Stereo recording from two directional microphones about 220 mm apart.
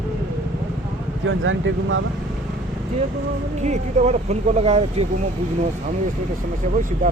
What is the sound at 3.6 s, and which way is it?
Speech, 30° right (ahead or behind).